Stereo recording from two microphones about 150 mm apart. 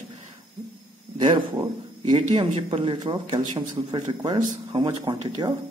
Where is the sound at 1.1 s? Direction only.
35° right (ahead or behind).